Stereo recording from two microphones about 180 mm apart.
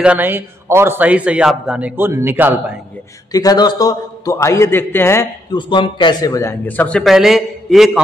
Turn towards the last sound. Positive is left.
turn(degrees=0)  # may be behind; listen again after turning